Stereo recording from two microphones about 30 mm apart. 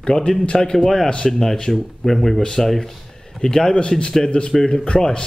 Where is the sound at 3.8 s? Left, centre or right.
Left.